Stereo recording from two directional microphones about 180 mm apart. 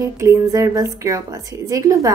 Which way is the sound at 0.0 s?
15° right (ahead or behind).